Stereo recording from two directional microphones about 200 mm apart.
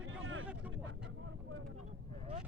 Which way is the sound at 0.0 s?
75° right (ahead or behind).